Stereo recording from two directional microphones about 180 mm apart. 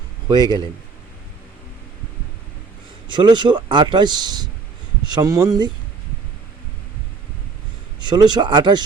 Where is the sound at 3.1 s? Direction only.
25° right (ahead or behind).